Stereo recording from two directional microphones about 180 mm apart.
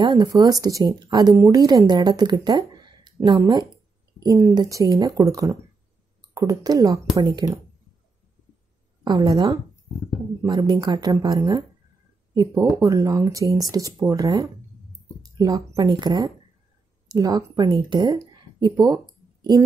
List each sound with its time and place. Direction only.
0.0 s speech: 25° right (ahead or behind)
9.0 s speech: 25° right (ahead or behind)